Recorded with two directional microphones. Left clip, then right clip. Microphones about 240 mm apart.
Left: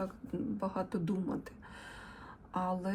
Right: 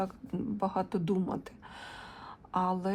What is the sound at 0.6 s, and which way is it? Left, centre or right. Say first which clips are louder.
Speech: right 7 dB; right.